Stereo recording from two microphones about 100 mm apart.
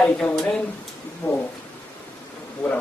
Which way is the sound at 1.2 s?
20° left (ahead or behind).